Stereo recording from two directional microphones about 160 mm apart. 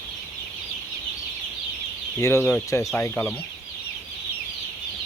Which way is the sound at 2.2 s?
15° left (ahead or behind).